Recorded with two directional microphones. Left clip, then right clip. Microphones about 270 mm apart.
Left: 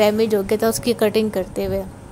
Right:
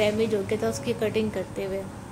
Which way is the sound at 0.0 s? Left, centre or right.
Left.